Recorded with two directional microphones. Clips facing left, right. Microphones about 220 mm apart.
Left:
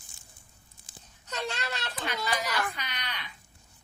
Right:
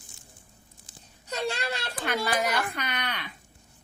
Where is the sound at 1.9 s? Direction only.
50° right (ahead or behind).